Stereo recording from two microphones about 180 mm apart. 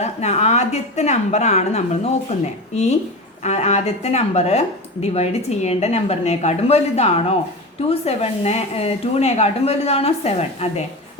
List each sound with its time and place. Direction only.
0.0 s speech: 35° left (ahead or behind)